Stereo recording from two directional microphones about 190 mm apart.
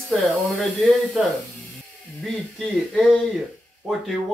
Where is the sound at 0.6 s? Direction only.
5° left (ahead or behind).